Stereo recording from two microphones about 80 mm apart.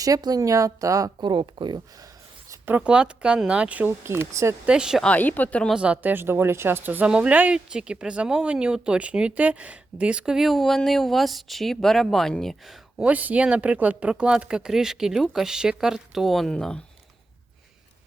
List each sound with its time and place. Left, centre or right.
0.0 s speech: right
1.2 s speech: right
2.8 s speech: centre
4.0 s speech: right
4.6 s speech: centre
5.0 s speech: left
5.7 s speech: centre
13.0 s speech: centre